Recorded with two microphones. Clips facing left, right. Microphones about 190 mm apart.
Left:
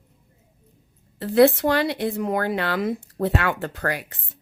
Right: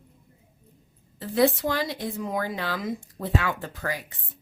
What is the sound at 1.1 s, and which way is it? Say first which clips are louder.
A woman's voice: left 6 dB; 70° left (ahead or behind).